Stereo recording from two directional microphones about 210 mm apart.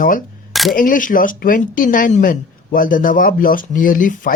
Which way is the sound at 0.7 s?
40° left (ahead or behind).